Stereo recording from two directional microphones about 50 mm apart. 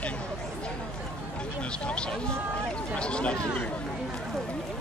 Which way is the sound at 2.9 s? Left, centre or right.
Left.